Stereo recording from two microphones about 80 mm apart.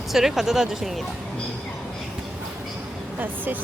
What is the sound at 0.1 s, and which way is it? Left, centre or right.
Speech, centre.